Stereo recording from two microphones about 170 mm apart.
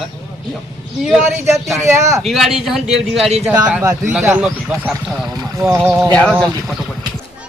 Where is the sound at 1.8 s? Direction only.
15° right (ahead or behind).